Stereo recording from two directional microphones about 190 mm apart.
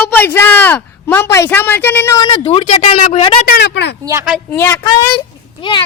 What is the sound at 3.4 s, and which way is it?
Speech, 60° left (ahead or behind).